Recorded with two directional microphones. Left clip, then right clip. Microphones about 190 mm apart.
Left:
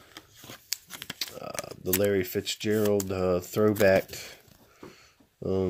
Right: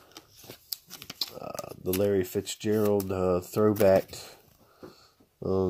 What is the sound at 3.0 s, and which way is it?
Speech, 40° right (ahead or behind).